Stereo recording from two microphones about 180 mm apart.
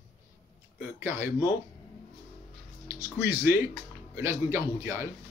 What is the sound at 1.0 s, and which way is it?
Speech, 15° right (ahead or behind).